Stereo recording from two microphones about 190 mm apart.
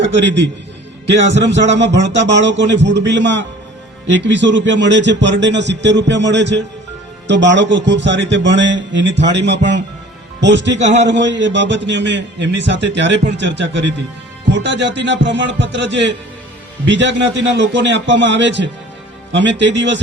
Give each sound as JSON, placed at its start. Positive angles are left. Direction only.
{"t": 1.4, "sound": "a man's voice", "side_deg": -65}